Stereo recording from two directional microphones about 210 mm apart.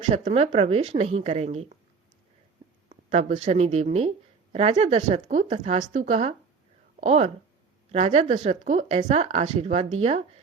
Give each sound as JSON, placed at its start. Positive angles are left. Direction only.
{"t": 0.3, "sound": "a woman's voice", "side_deg": -30}
{"t": 2.9, "sound": "a woman's voice", "side_deg": -35}